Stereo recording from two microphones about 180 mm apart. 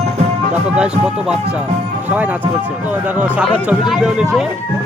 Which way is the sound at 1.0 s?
5° right (ahead or behind).